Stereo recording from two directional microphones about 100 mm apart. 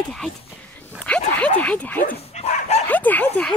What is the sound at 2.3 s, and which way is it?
Dog, 90° left.